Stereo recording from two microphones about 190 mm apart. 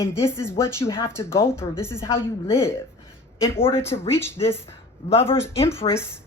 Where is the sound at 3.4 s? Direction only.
15° left (ahead or behind).